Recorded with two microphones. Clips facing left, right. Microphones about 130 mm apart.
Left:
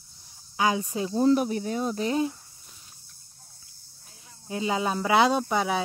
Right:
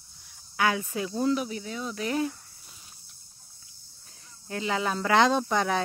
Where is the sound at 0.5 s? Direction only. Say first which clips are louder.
Left 1 dB; 20° left (ahead or behind).